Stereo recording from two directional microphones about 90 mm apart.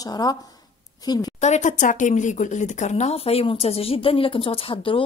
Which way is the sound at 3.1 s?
90° left.